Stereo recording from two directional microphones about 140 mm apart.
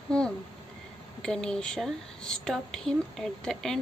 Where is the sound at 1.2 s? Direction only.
5° left (ahead or behind).